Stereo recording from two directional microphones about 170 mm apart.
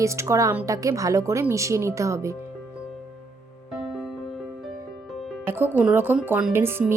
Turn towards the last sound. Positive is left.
turn(degrees=-15)  # may be behind; listen again after turning